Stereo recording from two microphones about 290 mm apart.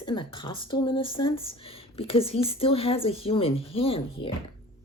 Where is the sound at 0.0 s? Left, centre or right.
Centre.